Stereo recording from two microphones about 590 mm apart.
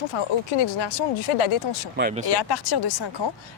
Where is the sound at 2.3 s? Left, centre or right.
Left.